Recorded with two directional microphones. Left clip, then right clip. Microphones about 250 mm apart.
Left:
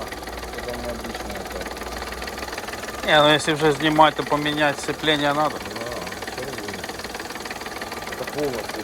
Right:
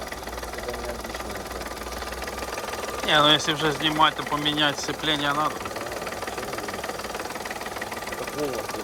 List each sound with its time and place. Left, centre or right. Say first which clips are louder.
3.1 s speech: left 3 dB; centre